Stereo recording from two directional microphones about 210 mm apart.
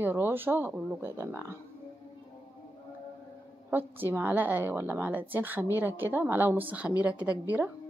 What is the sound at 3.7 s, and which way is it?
Speech, 10° right (ahead or behind).